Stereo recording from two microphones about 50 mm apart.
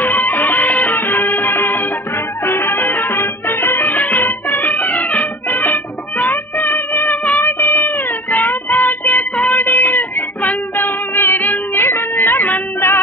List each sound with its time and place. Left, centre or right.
0.0 s music: left